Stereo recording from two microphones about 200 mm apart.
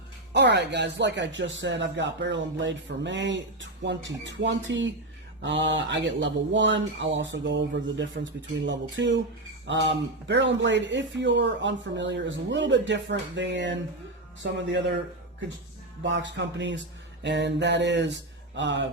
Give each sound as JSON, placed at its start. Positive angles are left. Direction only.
{"t": 0.3, "sound": "speech", "side_deg": -60}
{"t": 16.0, "sound": "speech", "side_deg": -65}